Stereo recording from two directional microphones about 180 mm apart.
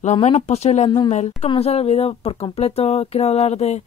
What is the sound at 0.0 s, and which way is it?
Speech, 40° left (ahead or behind).